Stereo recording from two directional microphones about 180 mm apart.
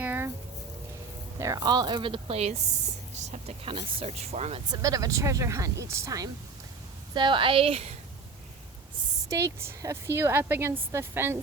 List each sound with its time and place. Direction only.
0.0 s a sound: 10° right (ahead or behind)
1.4 s speech: 20° right (ahead or behind); by 4.6 s 35° right (ahead or behind)
4.7 s speech: 20° right (ahead or behind)
9.6 s speech: 15° right (ahead or behind)